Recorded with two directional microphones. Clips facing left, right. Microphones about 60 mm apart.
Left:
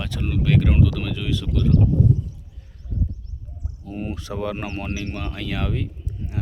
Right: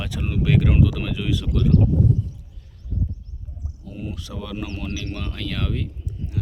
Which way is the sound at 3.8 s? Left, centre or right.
Left.